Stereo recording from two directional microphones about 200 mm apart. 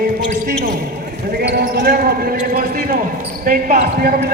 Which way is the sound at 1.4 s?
50° right (ahead or behind).